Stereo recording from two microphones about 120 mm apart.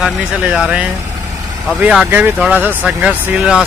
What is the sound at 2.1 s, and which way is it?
Speech, 15° right (ahead or behind).